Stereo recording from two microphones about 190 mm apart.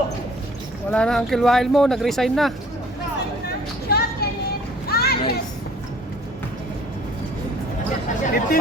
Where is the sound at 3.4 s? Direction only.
55° left (ahead or behind).